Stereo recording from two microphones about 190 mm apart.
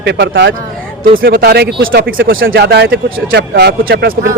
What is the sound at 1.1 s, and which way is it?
Speech, 50° right (ahead or behind).